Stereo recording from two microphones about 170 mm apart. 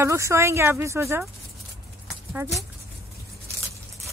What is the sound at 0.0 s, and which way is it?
Speech, 15° right (ahead or behind).